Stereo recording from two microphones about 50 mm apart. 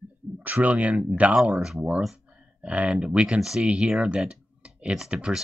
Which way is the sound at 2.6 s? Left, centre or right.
Right.